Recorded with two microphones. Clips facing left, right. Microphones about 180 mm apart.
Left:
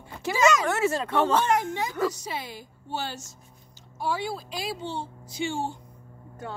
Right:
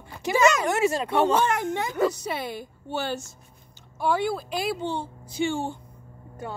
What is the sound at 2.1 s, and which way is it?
Speech, 60° right (ahead or behind).